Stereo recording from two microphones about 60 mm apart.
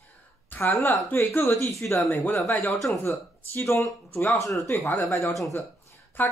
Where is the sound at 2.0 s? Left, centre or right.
Left.